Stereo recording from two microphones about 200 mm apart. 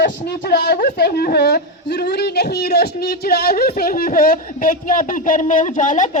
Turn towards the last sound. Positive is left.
turn(degrees=40)  # may be behind; listen again after turning